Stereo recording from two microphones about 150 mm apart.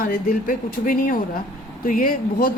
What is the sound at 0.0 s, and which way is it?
A woman's voice, 65° left (ahead or behind).